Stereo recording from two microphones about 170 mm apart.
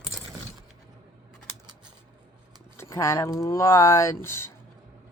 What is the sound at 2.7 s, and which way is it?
Speech, 15° left (ahead or behind).